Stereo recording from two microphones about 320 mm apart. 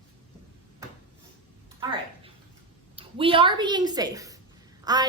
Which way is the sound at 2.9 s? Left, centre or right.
Centre.